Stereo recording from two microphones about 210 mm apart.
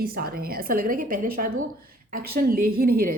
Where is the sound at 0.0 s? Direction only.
45° right (ahead or behind).